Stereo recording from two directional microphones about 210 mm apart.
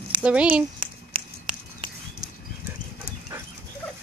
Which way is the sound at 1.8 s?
20° right (ahead or behind).